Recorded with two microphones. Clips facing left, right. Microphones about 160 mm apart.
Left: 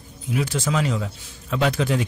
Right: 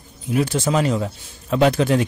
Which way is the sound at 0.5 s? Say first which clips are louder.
Right 4 dB; 35° right (ahead or behind).